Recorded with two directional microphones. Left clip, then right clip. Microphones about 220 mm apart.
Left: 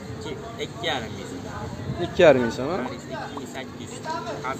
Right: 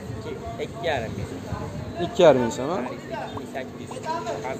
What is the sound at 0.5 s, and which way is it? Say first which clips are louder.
Speech: right 1 dB; 45° left (ahead or behind).